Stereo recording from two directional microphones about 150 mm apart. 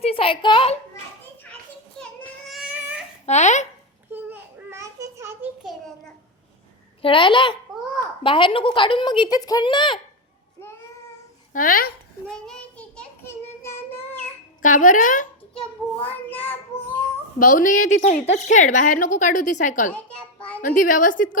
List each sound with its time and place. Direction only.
0.0 s a sound: 40° left (ahead or behind)
2.5 s baby cry: 5° right (ahead or behind)
3.2 s a sound: 50° left (ahead or behind)
4.1 s a sound: 15° right (ahead or behind)
7.0 s a child's voice: 35° left (ahead or behind)
11.5 s speech: 70° left (ahead or behind)
12.3 s child singing: 5° left (ahead or behind)
14.6 s a woman's voice: 65° left (ahead or behind)
16.0 s child singing: 10° left (ahead or behind)
17.4 s a woman's voice: 60° left (ahead or behind)